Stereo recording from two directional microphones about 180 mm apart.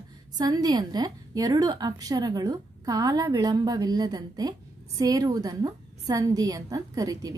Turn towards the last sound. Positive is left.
turn(degrees=-20)  # may be behind; listen again after turning